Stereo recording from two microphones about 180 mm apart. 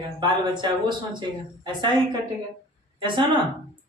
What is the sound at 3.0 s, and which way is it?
Speech, 25° right (ahead or behind).